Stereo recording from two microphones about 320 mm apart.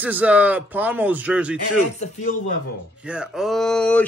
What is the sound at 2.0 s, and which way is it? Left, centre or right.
Speech, left.